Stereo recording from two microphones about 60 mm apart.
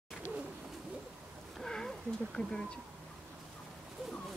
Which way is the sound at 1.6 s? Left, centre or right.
Centre.